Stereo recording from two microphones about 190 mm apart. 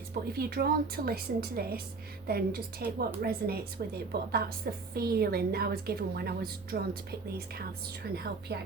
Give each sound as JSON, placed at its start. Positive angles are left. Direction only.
{"t": 0.1, "sound": "a woman's voice", "side_deg": -55}